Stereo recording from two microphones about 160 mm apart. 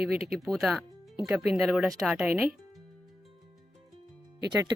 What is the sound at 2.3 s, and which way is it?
Speech, 15° right (ahead or behind).